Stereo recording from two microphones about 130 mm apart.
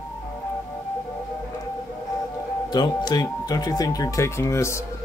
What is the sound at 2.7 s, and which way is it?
Speech, 35° left (ahead or behind).